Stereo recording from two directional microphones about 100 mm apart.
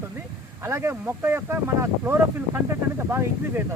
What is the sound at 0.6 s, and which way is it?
Speech, 25° right (ahead or behind).